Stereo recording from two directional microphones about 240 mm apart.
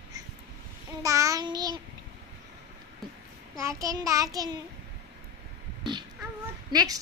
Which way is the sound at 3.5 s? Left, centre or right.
Centre.